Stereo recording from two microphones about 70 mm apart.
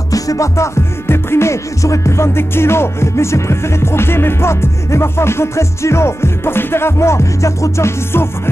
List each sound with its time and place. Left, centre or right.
0.1 s music: left